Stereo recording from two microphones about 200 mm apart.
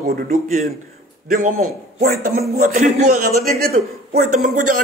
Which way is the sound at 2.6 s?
45° right (ahead or behind).